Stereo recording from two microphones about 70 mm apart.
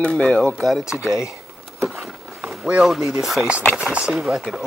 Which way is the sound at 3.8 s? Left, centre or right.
Centre.